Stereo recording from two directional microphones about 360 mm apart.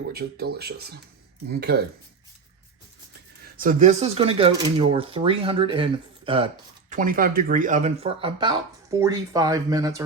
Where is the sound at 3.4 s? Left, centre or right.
Right.